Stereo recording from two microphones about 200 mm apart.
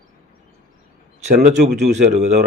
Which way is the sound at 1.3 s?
40° right (ahead or behind).